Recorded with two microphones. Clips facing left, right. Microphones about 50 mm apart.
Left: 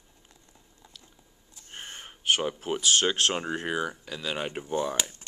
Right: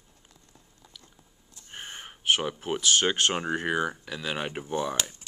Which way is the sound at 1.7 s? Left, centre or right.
Centre.